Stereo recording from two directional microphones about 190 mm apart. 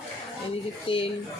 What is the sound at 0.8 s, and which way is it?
Speech, 30° left (ahead or behind).